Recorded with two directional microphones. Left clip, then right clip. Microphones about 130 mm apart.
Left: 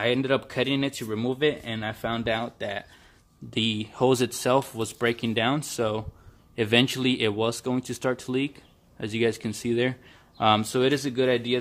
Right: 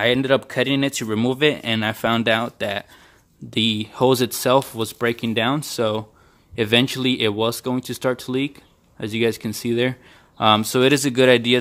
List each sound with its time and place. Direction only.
0.0 s speech: 35° right (ahead or behind)
1.0 s speech: 60° right (ahead or behind)
3.4 s speech: 30° right (ahead or behind)
11.0 s speech: 60° right (ahead or behind)